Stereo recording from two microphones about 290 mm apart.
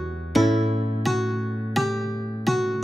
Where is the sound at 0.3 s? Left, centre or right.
Centre.